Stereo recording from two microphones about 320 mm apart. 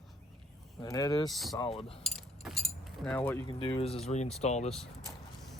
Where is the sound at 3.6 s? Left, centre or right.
Centre.